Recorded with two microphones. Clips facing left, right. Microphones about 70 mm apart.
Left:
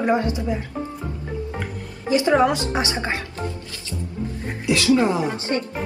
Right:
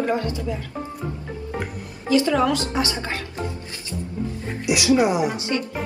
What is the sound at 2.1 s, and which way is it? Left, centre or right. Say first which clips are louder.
Speech: left 1 dB; left.